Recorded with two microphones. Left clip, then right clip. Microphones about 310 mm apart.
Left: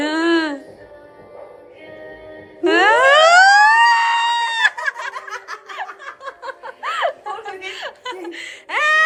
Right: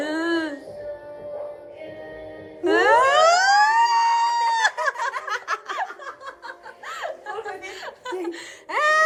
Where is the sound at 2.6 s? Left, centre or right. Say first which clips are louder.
Left 4 dB; centre; by 5.1 s right.